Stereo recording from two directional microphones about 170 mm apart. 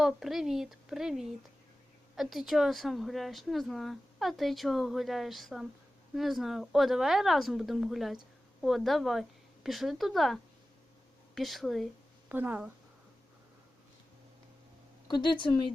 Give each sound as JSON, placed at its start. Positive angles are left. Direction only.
{"t": 0.0, "sound": "speech", "side_deg": 0}
{"t": 12.3, "sound": "speech", "side_deg": -10}
{"t": 15.0, "sound": "speech", "side_deg": 25}